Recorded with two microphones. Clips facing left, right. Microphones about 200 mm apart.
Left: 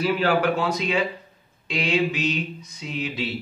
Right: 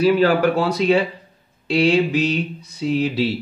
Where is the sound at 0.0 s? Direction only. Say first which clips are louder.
Right 6 dB; 35° right (ahead or behind).